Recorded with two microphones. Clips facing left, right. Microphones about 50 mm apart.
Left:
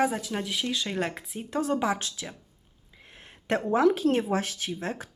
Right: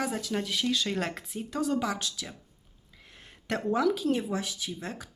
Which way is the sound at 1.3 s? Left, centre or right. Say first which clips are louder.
Left 2 dB; left.